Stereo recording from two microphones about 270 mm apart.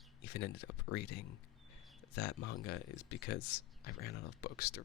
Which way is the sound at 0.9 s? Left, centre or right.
Left.